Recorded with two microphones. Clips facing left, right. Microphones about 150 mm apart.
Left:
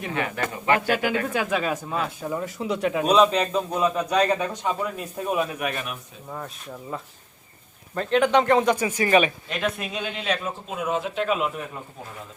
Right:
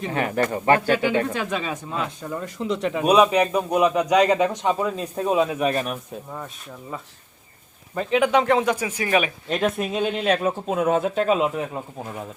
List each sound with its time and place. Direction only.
0.1 s a man's voice: 40° right (ahead or behind)
0.9 s speech: 10° left (ahead or behind)
3.0 s a man's voice: 10° right (ahead or behind); by 6.0 s 35° right (ahead or behind)
7.9 s speech: 5° right (ahead or behind)
9.5 s speech: 40° right (ahead or behind)